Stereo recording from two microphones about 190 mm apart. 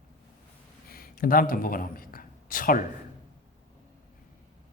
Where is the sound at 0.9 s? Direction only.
50° left (ahead or behind).